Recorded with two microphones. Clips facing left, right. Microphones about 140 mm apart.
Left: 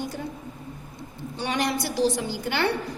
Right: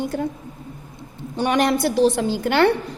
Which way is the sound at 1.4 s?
55° right (ahead or behind).